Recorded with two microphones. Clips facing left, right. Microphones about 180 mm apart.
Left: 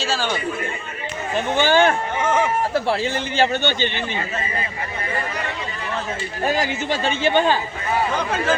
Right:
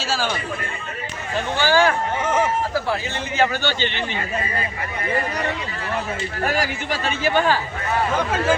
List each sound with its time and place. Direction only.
0.0 s speech: 5° right (ahead or behind)
1.4 s a man's voice: 20° left (ahead or behind)
2.2 s a sound: 10° right (ahead or behind)
2.7 s a man's voice: 30° left (ahead or behind)
6.4 s a man's voice: 20° left (ahead or behind)
8.1 s speech: 5° right (ahead or behind)